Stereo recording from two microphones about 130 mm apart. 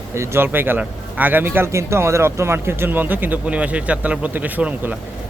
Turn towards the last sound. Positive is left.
turn(degrees=-10)  # may be behind; listen again after turning